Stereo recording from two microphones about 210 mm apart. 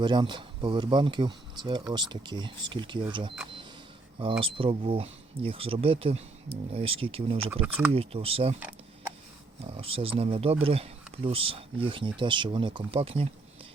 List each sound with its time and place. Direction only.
0.0 s speech: 20° right (ahead or behind)
9.6 s speech: 25° right (ahead or behind)